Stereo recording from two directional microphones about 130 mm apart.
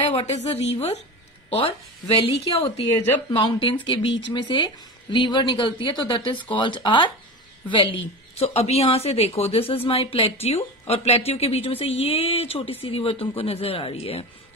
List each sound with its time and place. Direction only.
0.1 s speech: 55° left (ahead or behind)
3.3 s speech: 35° left (ahead or behind)